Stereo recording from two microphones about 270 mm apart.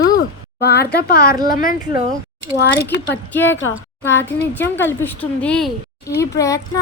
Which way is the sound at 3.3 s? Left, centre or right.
Centre.